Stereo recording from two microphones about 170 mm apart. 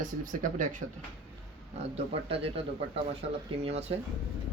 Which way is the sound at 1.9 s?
35° right (ahead or behind).